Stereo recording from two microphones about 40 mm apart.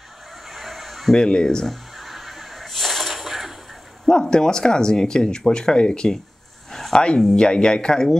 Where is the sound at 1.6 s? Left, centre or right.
Centre.